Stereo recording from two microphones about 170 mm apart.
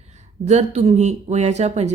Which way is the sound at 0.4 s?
40° right (ahead or behind).